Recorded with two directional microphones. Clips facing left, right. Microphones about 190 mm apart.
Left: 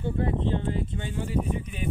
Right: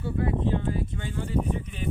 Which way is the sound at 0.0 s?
25° left (ahead or behind).